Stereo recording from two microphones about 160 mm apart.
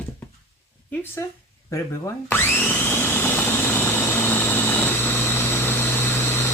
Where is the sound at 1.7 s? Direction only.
20° left (ahead or behind).